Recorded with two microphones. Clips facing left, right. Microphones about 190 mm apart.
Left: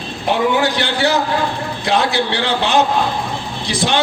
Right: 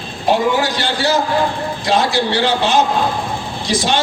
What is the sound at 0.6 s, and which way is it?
A man's voice, 60° left (ahead or behind).